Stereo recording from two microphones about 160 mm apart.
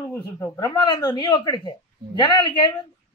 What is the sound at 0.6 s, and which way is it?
A woman's voice, 25° left (ahead or behind).